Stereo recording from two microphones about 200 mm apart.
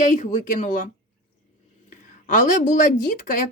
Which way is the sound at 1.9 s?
40° left (ahead or behind).